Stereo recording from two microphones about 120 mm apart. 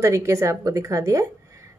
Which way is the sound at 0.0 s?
25° right (ahead or behind).